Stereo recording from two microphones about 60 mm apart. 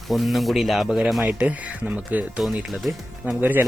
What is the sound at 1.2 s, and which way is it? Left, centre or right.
Speech, right.